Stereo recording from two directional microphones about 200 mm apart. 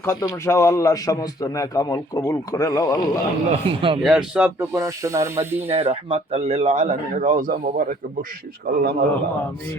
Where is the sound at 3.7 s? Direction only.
25° right (ahead or behind).